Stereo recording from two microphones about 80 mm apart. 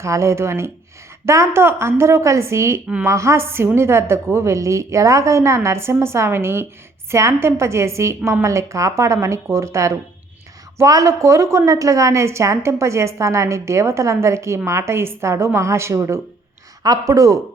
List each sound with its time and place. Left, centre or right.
0.0 s a woman's voice: right
16.8 s speech: right